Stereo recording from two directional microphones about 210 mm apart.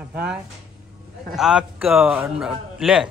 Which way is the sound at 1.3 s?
5° right (ahead or behind).